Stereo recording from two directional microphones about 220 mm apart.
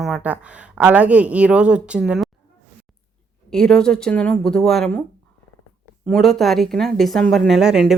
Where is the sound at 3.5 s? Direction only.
5° left (ahead or behind).